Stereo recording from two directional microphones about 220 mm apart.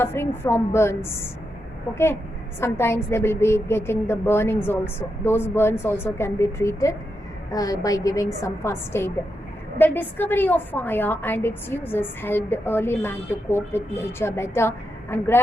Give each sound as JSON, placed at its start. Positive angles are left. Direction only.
{"t": 0.0, "sound": "a woman's voice", "side_deg": 10}
{"t": 2.6, "sound": "a woman's voice", "side_deg": 10}